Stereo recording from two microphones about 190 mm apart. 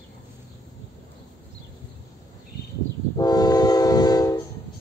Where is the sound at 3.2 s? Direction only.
20° left (ahead or behind).